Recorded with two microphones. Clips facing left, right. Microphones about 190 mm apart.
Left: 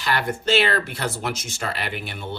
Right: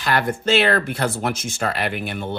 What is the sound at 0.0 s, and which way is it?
Speech, 50° right (ahead or behind).